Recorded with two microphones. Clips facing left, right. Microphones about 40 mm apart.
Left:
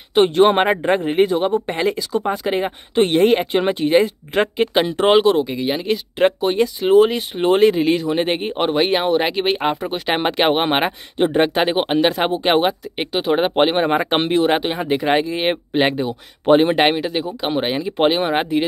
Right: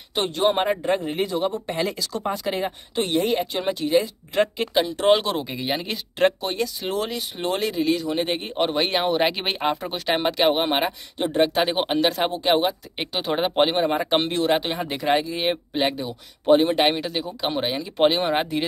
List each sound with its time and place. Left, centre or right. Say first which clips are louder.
0.1 s speech: left 8 dB; left
5.4 s speech: left 6 dB; centre
6.1 s speech: left 4 dB; centre
8.9 s speech: left 4 dB; centre
10.0 s speech: left 3 dB; left
11.5 s speech: left 4 dB; left
12.9 s speech: left 6 dB; left
13.7 s speech: left 4 dB; left
14.3 s speech: left 5 dB; left
16.9 s speech: left 5 dB; centre